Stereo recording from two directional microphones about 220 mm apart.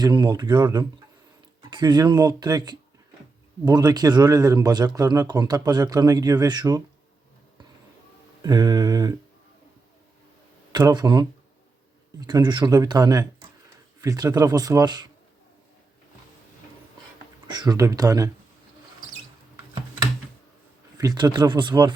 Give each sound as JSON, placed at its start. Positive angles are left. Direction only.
{"t": 0.0, "sound": "a man's voice", "side_deg": -20}
{"t": 8.4, "sound": "a man's voice", "side_deg": -20}
{"t": 10.7, "sound": "a man's voice", "side_deg": -20}
{"t": 17.5, "sound": "a man's voice", "side_deg": -20}
{"t": 21.0, "sound": "speech", "side_deg": -20}